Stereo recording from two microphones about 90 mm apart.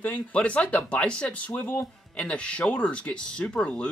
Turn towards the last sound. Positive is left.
turn(degrees=10)  # may be behind; listen again after turning